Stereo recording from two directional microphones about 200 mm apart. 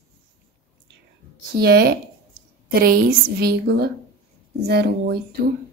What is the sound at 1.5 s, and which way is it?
A woman's voice, 50° right (ahead or behind).